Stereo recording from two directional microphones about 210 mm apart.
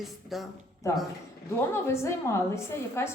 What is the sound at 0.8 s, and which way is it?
A woman's voice, 15° left (ahead or behind).